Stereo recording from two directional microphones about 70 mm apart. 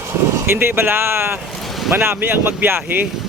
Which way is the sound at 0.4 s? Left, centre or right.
Right.